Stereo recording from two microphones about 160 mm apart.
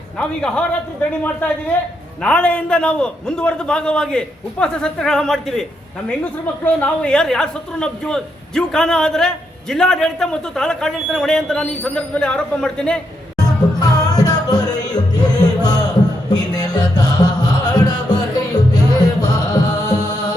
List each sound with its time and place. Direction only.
0.2 s a man's voice: 5° left (ahead or behind)
1.7 s a man's voice: 10° left (ahead or behind)
6.7 s a man's voice: 10° left (ahead or behind)
13.3 s music: 25° left (ahead or behind)